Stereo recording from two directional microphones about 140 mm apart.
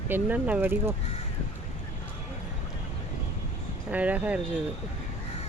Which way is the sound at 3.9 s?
10° right (ahead or behind).